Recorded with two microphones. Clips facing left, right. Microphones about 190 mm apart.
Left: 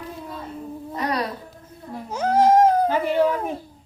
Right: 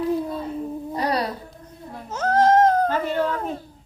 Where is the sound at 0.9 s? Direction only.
35° right (ahead or behind).